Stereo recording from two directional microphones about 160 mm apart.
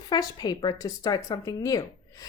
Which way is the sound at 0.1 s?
25° left (ahead or behind).